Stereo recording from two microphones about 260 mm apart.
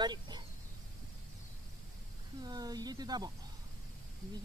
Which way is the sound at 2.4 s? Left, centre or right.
Centre.